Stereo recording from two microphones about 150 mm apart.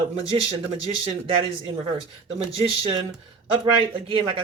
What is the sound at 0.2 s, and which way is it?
Speech, 40° right (ahead or behind).